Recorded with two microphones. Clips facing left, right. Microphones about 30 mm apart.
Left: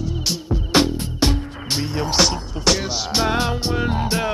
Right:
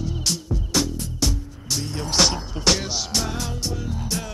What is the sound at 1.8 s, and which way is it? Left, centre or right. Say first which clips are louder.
Music: left 3 dB; centre.